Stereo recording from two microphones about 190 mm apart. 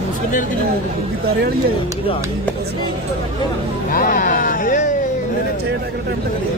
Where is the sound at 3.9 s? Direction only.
45° left (ahead or behind).